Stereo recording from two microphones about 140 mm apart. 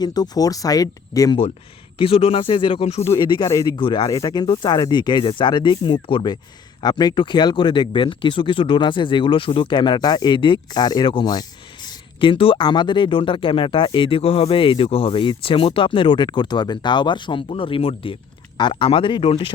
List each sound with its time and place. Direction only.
0.0 s speech: 30° left (ahead or behind)
2.0 s speech: 45° left (ahead or behind)
3.1 s speech: 30° left (ahead or behind)